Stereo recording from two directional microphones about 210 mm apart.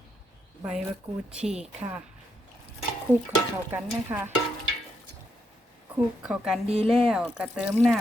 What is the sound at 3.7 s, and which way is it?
Stir, 10° right (ahead or behind).